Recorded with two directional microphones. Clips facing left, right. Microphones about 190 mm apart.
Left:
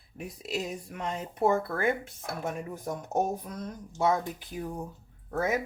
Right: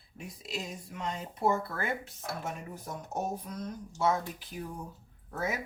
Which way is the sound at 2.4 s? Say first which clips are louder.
Left 5 dB; 50° left (ahead or behind).